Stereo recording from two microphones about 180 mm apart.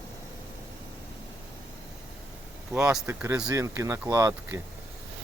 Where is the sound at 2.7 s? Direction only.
5° right (ahead or behind).